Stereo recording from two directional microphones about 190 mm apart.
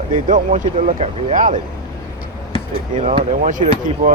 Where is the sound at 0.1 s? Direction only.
45° right (ahead or behind).